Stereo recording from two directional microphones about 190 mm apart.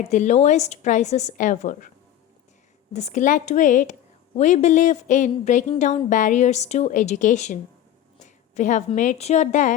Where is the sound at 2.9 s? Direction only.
35° left (ahead or behind).